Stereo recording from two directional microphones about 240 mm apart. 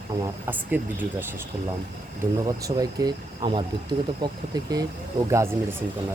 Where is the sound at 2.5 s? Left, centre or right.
Centre.